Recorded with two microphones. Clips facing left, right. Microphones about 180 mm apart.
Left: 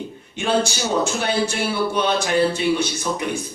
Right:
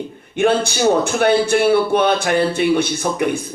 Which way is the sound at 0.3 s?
55° right (ahead or behind).